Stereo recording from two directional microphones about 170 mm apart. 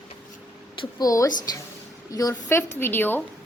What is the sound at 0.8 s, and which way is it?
A woman's voice, 20° left (ahead or behind).